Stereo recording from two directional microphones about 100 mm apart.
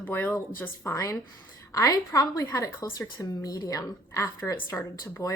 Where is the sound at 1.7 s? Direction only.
35° left (ahead or behind).